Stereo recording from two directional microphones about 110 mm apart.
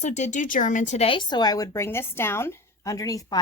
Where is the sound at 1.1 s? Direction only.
45° left (ahead or behind).